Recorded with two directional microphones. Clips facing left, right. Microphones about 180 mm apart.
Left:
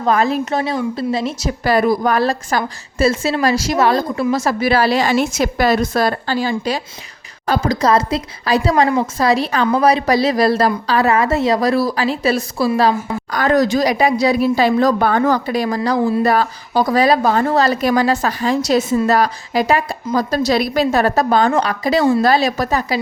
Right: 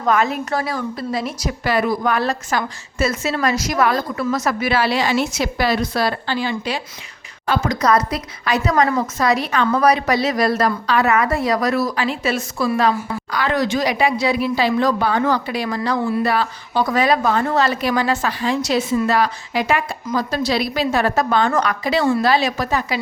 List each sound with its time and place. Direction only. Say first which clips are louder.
0.0 s speech: left 3 dB; 30° left (ahead or behind)
13.3 s speech: left 5 dB; 45° left (ahead or behind)